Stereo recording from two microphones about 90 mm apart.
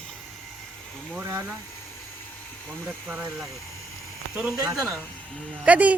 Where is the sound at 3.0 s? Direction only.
15° right (ahead or behind).